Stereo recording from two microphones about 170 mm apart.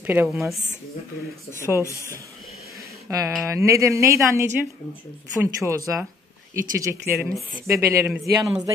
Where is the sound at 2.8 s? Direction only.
20° right (ahead or behind).